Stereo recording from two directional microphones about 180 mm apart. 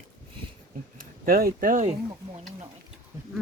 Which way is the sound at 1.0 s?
55° right (ahead or behind).